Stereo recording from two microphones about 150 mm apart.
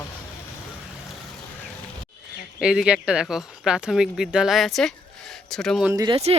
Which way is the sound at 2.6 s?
5° right (ahead or behind).